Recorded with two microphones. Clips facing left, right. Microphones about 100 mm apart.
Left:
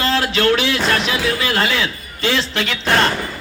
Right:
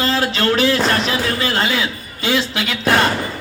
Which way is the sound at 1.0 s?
35° right (ahead or behind).